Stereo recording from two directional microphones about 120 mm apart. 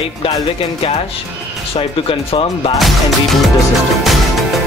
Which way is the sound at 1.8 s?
50° left (ahead or behind).